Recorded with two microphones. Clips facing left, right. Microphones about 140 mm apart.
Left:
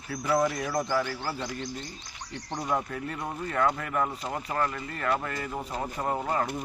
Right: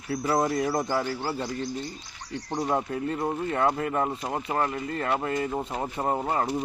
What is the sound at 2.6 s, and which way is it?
Speech, 30° right (ahead or behind).